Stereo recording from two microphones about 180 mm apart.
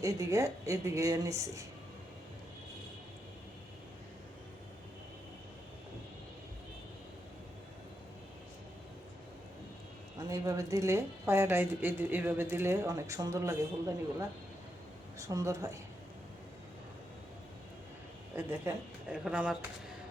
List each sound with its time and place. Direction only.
0.0 s a woman's voice: 15° right (ahead or behind)
10.2 s a woman's voice: 15° right (ahead or behind)
19.1 s speech: 5° right (ahead or behind)